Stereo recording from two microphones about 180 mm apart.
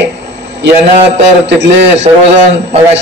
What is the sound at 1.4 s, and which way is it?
Speech, 80° right.